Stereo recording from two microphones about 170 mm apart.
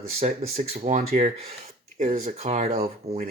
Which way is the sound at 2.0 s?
40° right (ahead or behind).